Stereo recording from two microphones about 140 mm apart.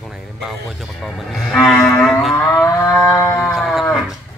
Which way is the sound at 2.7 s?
20° left (ahead or behind).